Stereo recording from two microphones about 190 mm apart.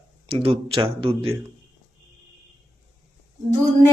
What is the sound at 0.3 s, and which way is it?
A man's voice, 30° right (ahead or behind).